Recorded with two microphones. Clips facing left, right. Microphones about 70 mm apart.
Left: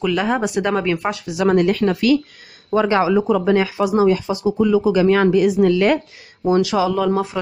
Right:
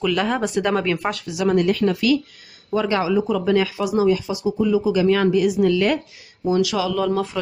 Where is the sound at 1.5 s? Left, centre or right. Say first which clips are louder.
Left 2 dB; left.